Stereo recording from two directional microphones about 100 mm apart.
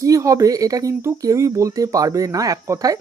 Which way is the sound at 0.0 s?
35° right (ahead or behind).